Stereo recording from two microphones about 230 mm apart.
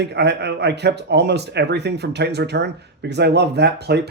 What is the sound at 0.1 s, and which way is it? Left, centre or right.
Speech, right.